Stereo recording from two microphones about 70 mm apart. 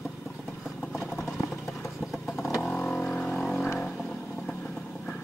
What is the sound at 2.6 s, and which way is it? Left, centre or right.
Vehicle, centre.